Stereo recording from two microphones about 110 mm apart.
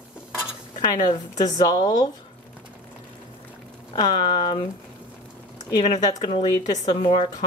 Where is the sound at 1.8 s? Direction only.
35° left (ahead or behind).